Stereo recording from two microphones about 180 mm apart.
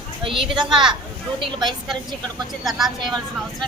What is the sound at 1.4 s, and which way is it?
Speech, 30° right (ahead or behind).